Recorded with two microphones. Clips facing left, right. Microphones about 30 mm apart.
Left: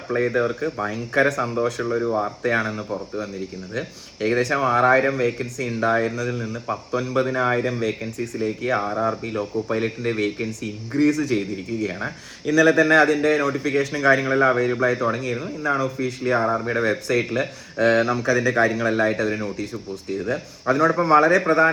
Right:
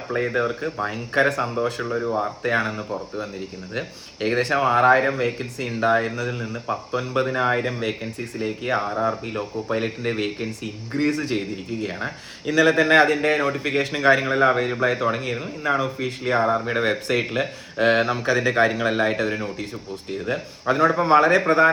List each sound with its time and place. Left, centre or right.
0.3 s speech: centre
0.9 s a man's voice: right
1.8 s speech: centre
2.4 s speech: centre
3.8 s a man's voice: right
8.9 s a man's voice: centre; by 11.4 s right
11.9 s speech: centre
12.5 s a man's voice: right
14.3 s a man's voice: right